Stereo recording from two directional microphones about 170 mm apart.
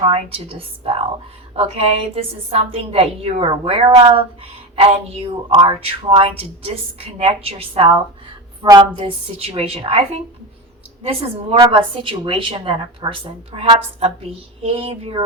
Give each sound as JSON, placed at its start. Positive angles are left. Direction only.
{"t": 0.0, "sound": "speech", "side_deg": -35}
{"t": 8.6, "sound": "a woman's voice", "side_deg": -20}
{"t": 9.4, "sound": "speech", "side_deg": -35}
{"t": 11.6, "sound": "speech", "side_deg": -25}